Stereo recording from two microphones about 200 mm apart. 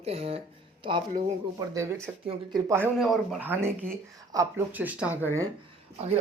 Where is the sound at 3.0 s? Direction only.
Centre (ahead or behind).